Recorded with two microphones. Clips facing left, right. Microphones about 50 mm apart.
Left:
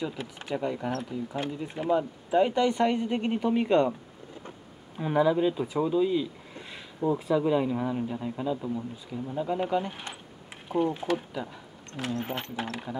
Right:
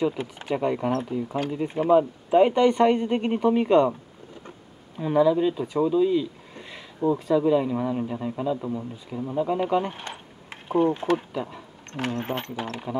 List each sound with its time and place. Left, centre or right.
0.0 s speech: right
3.2 s a woman's voice: centre
4.9 s speech: centre; by 10.0 s right
10.7 s speech: right